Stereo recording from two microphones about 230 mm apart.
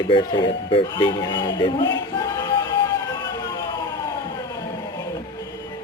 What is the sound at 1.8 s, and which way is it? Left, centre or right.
Speech, left.